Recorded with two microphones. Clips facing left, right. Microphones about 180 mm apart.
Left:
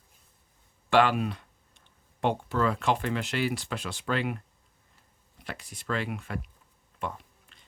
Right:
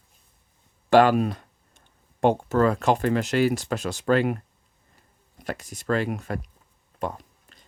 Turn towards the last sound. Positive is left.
turn(degrees=-40)  # may be behind; listen again after turning